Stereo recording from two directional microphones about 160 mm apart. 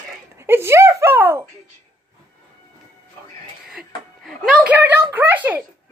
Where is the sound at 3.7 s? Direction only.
5° right (ahead or behind).